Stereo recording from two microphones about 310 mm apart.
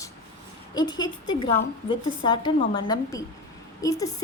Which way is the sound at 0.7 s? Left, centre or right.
Centre.